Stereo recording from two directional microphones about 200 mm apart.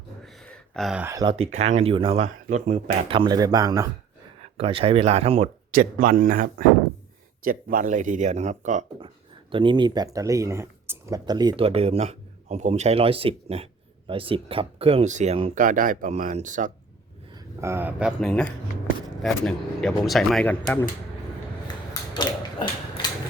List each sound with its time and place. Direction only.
0.3 s a sound: 5° left (ahead or behind)
1.0 s speech: 20° right (ahead or behind)
1.5 s speech: 35° right (ahead or behind); by 3.8 s 20° right (ahead or behind)
4.4 s speech: 30° right (ahead or behind)
5.7 s speech: 45° right (ahead or behind)
9.5 s speech: 25° right (ahead or behind)
15.5 s speech: 40° right (ahead or behind)
17.3 s speech: 15° right (ahead or behind)
18.2 s speech: 5° left (ahead or behind)
22.1 s mechanisms: 25° left (ahead or behind)